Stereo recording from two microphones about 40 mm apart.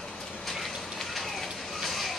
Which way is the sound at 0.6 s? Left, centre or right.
Centre.